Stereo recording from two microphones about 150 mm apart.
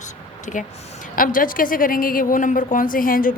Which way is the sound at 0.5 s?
55° left (ahead or behind).